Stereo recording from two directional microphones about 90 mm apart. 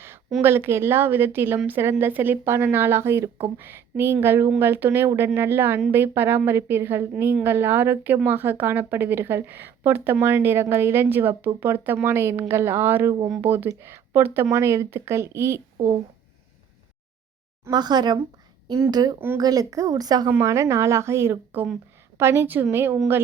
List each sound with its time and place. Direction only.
0.4 s a woman's voice: 25° right (ahead or behind)
17.7 s a woman's voice: 50° right (ahead or behind)
20.4 s a woman's voice: 35° right (ahead or behind)